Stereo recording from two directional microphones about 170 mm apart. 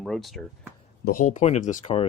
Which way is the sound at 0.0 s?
Centre (ahead or behind).